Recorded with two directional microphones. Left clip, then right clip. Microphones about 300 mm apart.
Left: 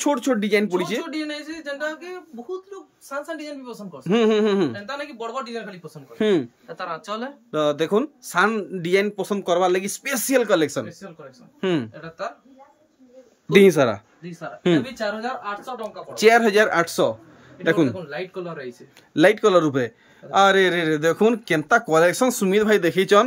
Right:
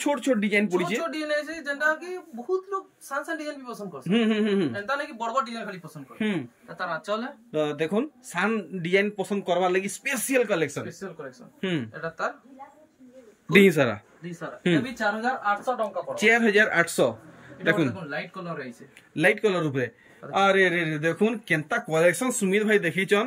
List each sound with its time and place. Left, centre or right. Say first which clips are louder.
0.0 s a man's voice: left 3 dB; centre
4.0 s a man's voice: left 7 dB; centre
5.3 s speech: right 5 dB; centre
6.1 s a man's voice: left 10 dB; centre
7.5 s a man's voice: left 6 dB; centre
11.9 s speech: right 2 dB; centre
13.5 s a man's voice: left 4 dB; centre
19.1 s a man's voice: left 7 dB; centre